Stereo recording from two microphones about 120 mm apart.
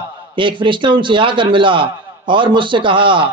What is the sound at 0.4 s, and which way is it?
A man's voice, 45° right (ahead or behind).